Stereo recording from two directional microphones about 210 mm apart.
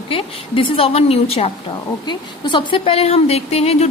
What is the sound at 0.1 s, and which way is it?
A woman's voice, 25° left (ahead or behind).